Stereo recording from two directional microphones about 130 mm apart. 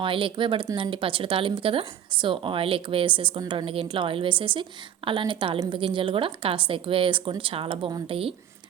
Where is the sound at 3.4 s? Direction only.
30° right (ahead or behind).